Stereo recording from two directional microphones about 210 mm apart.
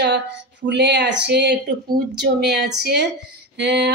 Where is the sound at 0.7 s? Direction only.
55° right (ahead or behind).